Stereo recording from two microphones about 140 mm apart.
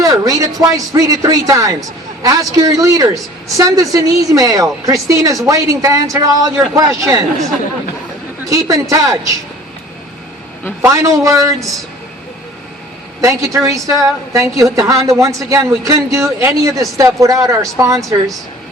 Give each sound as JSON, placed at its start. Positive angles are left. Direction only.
{"t": 0.0, "sound": "a woman's voice", "side_deg": -25}
{"t": 8.4, "sound": "a woman's voice", "side_deg": -25}
{"t": 10.8, "sound": "a woman's voice", "side_deg": -20}
{"t": 13.2, "sound": "a woman's voice", "side_deg": -25}